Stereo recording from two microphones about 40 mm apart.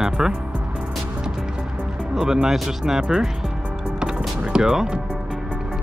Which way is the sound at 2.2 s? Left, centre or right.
Centre.